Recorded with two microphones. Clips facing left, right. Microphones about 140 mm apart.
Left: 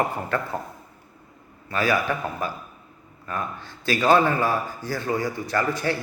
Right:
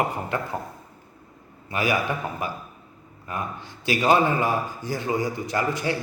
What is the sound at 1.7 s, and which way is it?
A man's voice, 15° right (ahead or behind).